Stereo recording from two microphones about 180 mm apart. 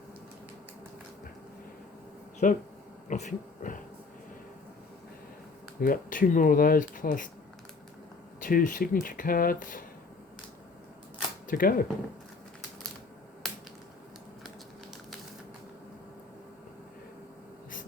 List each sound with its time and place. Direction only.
2.4 s speech: 45° left (ahead or behind)
5.8 s speech: 50° left (ahead or behind)
8.4 s speech: 50° left (ahead or behind)
11.4 s speech: 50° left (ahead or behind)